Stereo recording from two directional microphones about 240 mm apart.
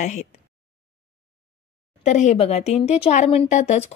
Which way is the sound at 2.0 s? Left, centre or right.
Left.